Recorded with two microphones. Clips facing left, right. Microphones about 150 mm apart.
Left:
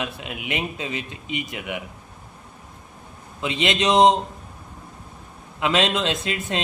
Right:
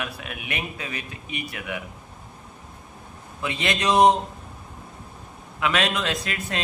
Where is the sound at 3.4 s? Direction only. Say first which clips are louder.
Left 3 dB; 20° left (ahead or behind).